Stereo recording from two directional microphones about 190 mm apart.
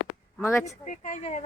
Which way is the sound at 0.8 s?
40° left (ahead or behind).